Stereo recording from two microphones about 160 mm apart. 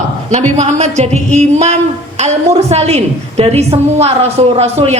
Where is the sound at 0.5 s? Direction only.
45° right (ahead or behind).